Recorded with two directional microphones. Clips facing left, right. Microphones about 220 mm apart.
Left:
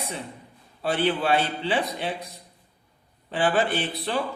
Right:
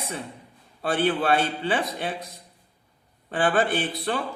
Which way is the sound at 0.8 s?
50° right (ahead or behind).